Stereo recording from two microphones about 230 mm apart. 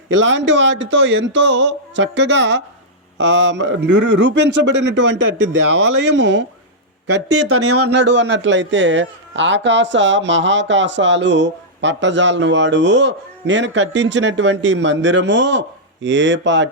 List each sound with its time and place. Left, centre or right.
0.1 s a man's voice: right
7.3 s speech: right
7.9 s a man's voice: right